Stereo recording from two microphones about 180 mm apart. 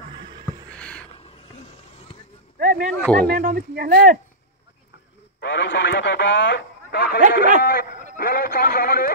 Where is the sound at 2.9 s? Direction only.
Centre (ahead or behind).